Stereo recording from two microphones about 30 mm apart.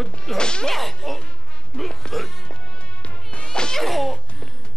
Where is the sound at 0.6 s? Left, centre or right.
Centre.